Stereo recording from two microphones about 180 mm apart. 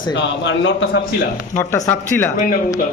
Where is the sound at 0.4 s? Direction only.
90° left.